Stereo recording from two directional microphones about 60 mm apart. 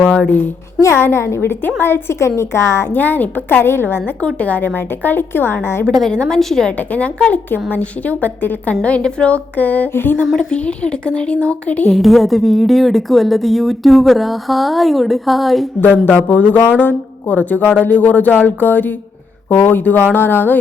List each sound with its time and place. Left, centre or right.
0.0 s speech: left
0.8 s a woman's voice: left
2.9 s a woman's voice: left
4.2 s a woman's voice: left
5.8 s speech: centre
6.7 s a woman's voice: left
10.3 s speech: centre
11.9 s a woman's voice: centre
16.0 s a woman's voice: left